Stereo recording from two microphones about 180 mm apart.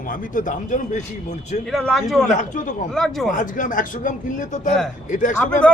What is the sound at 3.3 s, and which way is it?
Speech, 45° left (ahead or behind).